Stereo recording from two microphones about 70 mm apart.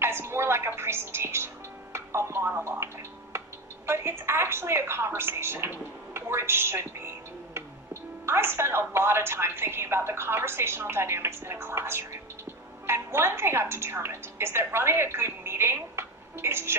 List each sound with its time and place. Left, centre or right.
0.0 s a woman's voice: right